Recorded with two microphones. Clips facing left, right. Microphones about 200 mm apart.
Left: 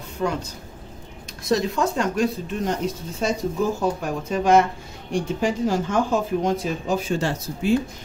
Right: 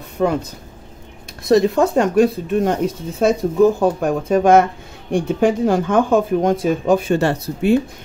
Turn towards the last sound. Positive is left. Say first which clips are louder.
# right 5 dB
turn(degrees=-60)  # may be behind; listen again after turning